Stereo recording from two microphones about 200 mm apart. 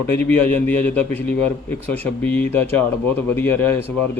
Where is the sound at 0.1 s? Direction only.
10° left (ahead or behind).